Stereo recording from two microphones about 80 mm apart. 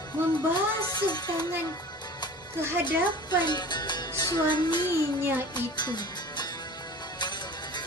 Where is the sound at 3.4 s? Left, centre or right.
Left.